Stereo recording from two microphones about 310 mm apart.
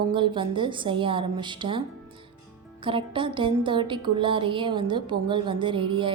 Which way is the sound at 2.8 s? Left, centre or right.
Centre.